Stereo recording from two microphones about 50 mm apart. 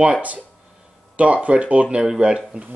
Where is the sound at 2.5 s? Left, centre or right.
Right.